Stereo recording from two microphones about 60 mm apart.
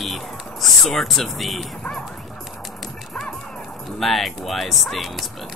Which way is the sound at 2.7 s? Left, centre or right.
Centre.